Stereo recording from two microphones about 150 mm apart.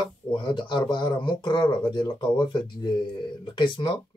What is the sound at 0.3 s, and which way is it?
Speech, 30° left (ahead or behind).